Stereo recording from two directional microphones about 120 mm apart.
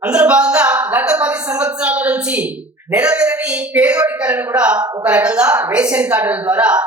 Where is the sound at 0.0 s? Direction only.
10° right (ahead or behind).